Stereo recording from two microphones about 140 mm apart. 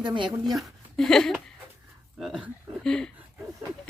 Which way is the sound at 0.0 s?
35° right (ahead or behind).